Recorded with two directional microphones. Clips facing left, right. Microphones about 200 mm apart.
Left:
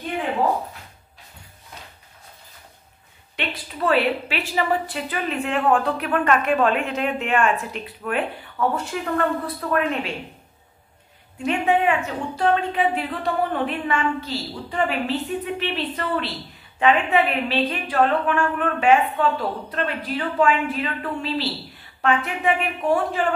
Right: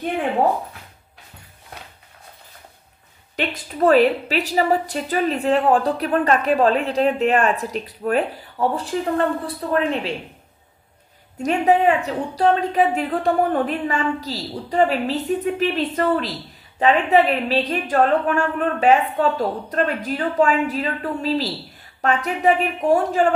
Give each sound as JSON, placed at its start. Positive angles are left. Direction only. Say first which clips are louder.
{"t": 3.3, "sound": "a woman's voice", "louder": "right 6 dB", "side_deg": -40}
{"t": 11.4, "sound": "a woman's voice", "louder": "right 3 dB", "side_deg": -35}